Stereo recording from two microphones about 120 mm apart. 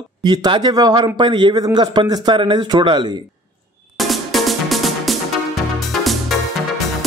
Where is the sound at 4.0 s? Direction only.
Centre (ahead or behind).